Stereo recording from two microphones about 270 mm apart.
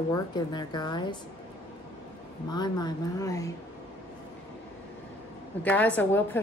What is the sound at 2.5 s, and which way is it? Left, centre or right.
A woman's voice, centre.